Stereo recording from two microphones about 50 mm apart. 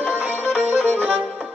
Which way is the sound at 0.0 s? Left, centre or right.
Right.